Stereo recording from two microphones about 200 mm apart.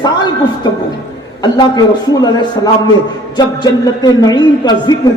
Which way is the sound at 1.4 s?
20° left (ahead or behind).